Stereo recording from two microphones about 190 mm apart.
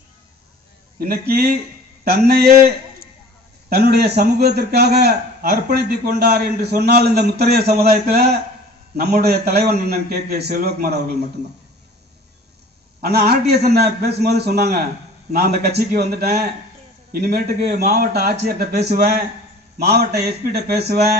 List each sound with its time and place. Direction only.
0.9 s a man's voice: 55° right (ahead or behind)
13.0 s a man's voice: 55° right (ahead or behind)